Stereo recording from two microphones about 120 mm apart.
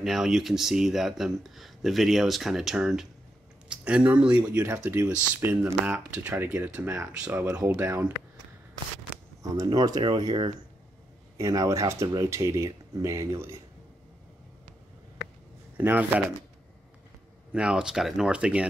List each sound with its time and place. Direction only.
0.0 s speech: 5° right (ahead or behind)
9.4 s speech: 30° right (ahead or behind)
15.8 s speech: 15° right (ahead or behind)
17.5 s speech: 10° right (ahead or behind)